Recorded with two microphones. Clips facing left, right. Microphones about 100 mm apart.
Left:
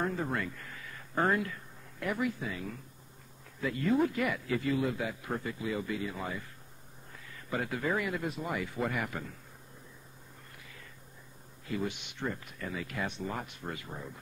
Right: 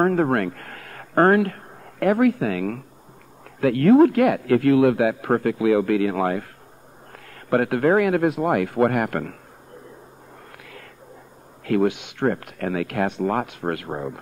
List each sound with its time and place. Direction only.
0.0 s speech: 65° right (ahead or behind)
10.6 s a sound: 75° right (ahead or behind)
11.6 s speech: 75° right (ahead or behind)